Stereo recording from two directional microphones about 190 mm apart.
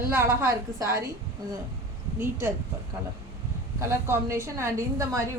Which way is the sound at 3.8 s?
15° right (ahead or behind).